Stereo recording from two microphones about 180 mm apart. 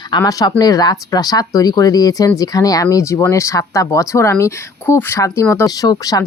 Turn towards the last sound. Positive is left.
turn(degrees=20)  # may be behind; listen again after turning